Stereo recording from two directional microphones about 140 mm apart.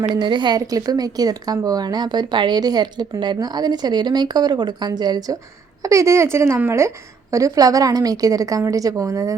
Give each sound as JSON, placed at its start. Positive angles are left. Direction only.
{"t": 0.1, "sound": "a woman's voice", "side_deg": -35}